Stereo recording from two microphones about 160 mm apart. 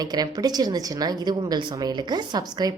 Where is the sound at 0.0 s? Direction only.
25° right (ahead or behind).